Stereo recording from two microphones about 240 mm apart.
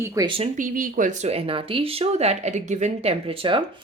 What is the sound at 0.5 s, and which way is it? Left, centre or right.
Speech, right.